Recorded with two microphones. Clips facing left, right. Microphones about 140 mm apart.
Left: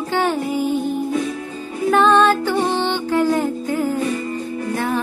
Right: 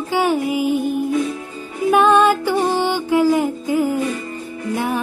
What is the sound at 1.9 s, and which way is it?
Music, 10° right (ahead or behind).